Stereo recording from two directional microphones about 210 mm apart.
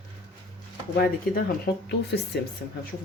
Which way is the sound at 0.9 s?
45° left (ahead or behind).